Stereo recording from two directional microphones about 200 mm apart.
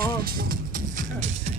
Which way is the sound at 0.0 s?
50° right (ahead or behind).